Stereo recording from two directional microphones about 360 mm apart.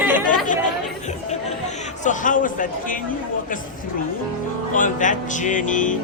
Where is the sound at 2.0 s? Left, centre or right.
Left.